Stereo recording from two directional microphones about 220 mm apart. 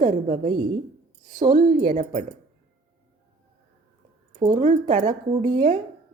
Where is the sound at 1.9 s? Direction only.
35° right (ahead or behind).